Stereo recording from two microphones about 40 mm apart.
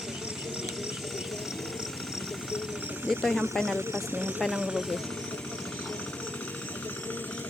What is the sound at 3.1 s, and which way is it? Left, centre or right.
Speech, centre.